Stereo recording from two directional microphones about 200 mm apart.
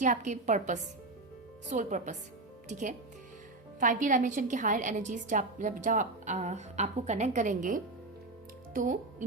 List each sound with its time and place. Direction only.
0.0 s a woman's voice: 40° right (ahead or behind)